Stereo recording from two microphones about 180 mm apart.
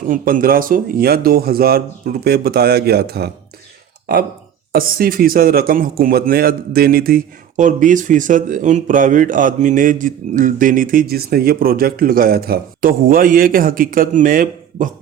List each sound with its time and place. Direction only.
0.1 s a man's voice: 50° right (ahead or behind)